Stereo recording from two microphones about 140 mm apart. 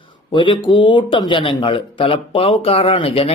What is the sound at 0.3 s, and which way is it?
Speech, 35° left (ahead or behind).